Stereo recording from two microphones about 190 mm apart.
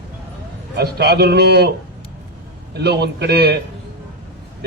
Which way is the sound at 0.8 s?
60° right (ahead or behind).